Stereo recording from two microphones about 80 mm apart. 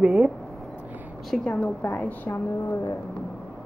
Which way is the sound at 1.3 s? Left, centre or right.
Centre.